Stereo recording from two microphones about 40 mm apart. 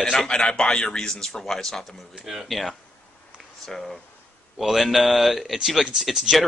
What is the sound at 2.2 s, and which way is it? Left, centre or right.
Speech, centre.